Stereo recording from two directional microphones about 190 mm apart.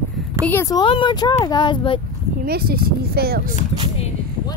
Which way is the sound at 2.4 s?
55° right (ahead or behind).